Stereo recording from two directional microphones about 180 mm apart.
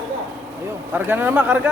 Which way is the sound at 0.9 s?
10° right (ahead or behind).